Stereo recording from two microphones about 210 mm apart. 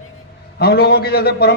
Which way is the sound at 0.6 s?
50° left (ahead or behind).